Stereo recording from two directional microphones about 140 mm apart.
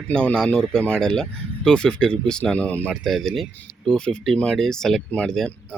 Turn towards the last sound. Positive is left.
turn(degrees=5)  # may be behind; listen again after turning